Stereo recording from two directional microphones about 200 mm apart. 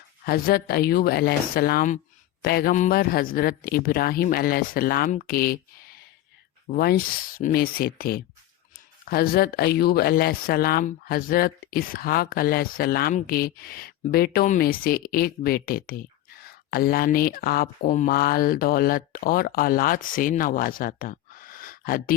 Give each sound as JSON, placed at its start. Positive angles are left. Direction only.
{"t": 0.3, "sound": "speech", "side_deg": 50}